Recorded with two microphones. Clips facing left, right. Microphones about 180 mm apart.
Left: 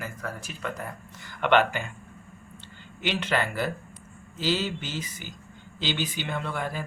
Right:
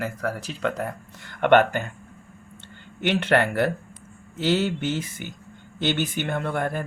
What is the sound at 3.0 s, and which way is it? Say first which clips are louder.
Speech: right 6 dB; 55° right (ahead or behind).